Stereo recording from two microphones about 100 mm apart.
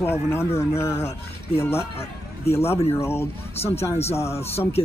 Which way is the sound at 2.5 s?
90° left.